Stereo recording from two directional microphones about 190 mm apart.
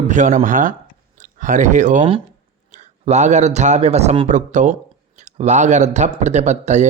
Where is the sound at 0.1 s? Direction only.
40° right (ahead or behind).